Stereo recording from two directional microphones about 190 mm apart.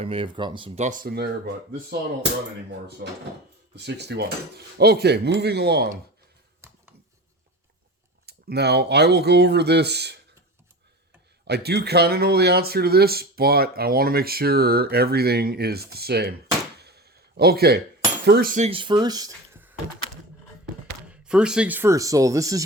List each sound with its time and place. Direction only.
0.0 s speech: 30° right (ahead or behind)
0.9 s speech: 50° right (ahead or behind)
3.8 s speech: 65° right (ahead or behind)
8.3 s speech: 60° right (ahead or behind)
11.4 s speech: 60° right (ahead or behind)
16.8 s a sound: 55° right (ahead or behind)
18.3 s speech: 50° right (ahead or behind); by 19.3 s 20° right (ahead or behind)
21.1 s speech: 5° right (ahead or behind)